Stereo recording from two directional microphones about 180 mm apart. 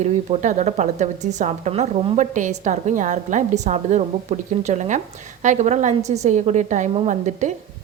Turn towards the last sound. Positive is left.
turn(degrees=-45)  # may be behind; listen again after turning